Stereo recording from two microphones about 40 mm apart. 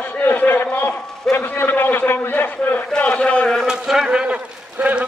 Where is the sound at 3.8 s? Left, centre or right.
Centre.